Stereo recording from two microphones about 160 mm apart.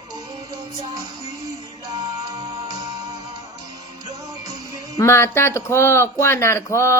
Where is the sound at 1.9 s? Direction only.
25° right (ahead or behind).